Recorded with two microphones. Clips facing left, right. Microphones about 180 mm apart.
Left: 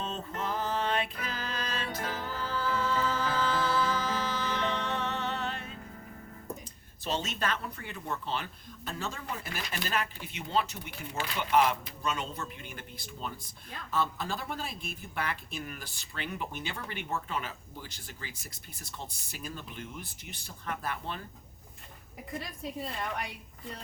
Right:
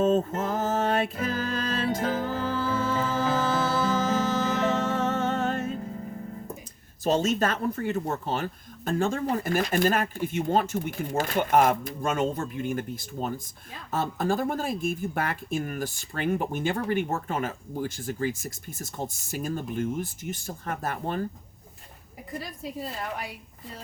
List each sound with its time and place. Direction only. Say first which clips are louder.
0.0 s mantra: right 15 dB; 45° right (ahead or behind)
0.3 s a sound: right 6 dB; 45° right (ahead or behind)
1.2 s music: right 9 dB; 50° right (ahead or behind)
7.0 s speech: right 10 dB; 45° right (ahead or behind)
22.4 s a woman's voice: right 3 dB; centre (ahead or behind)